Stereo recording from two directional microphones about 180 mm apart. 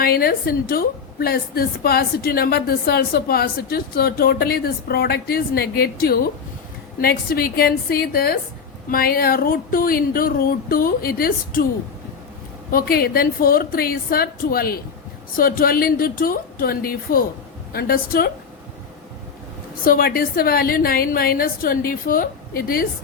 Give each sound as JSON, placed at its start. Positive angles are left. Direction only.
{"t": 0.0, "sound": "a woman's voice", "side_deg": 55}
{"t": 12.7, "sound": "a woman's voice", "side_deg": 55}
{"t": 19.8, "sound": "a woman's voice", "side_deg": 55}